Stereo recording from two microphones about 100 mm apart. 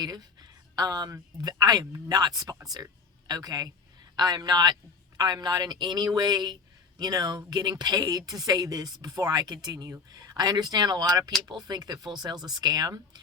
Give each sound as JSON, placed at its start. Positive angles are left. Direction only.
{"t": 0.0, "sound": "a woman's voice", "side_deg": -45}